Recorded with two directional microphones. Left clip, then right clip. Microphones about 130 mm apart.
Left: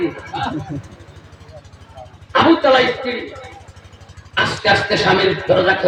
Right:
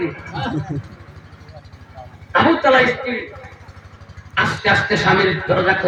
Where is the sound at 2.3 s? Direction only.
40° left (ahead or behind).